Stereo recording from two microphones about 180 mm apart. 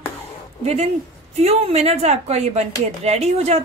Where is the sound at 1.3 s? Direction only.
35° right (ahead or behind).